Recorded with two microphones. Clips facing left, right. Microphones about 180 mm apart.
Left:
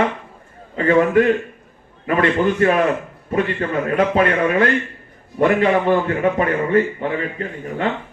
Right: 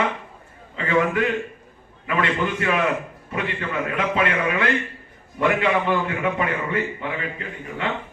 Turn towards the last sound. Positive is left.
turn(degrees=40)  # may be behind; listen again after turning